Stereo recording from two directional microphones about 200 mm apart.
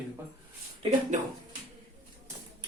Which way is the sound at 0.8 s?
35° right (ahead or behind).